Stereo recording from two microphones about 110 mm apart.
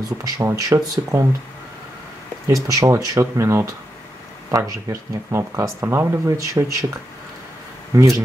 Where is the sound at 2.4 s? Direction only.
30° right (ahead or behind).